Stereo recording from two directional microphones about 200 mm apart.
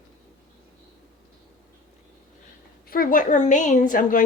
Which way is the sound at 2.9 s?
45° left (ahead or behind).